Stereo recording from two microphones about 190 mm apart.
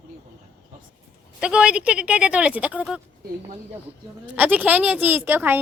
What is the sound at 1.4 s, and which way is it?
Speech, 5° right (ahead or behind).